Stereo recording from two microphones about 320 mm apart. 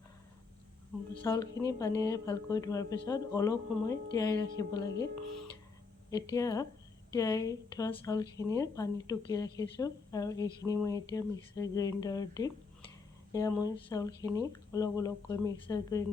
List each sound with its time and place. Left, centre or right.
1.2 s a woman's voice: centre
6.1 s a woman's voice: centre